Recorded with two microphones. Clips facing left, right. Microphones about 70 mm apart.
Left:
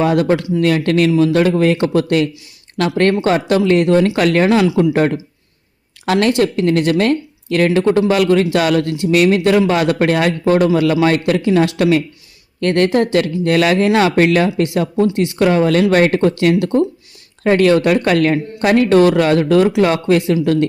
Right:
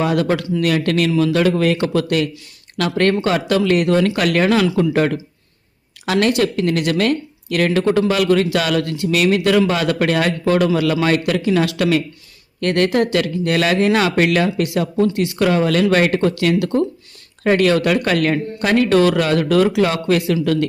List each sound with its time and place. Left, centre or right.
0.0 s speech: left
9.1 s speech: left